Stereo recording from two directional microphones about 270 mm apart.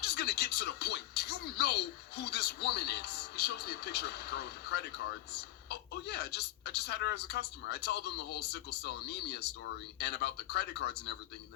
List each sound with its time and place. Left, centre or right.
0.0 s speech: left